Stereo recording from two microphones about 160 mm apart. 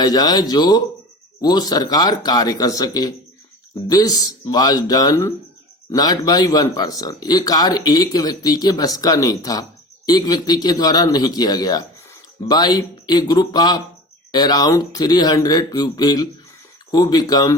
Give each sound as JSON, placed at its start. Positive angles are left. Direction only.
{"t": 0.0, "sound": "speech", "side_deg": 25}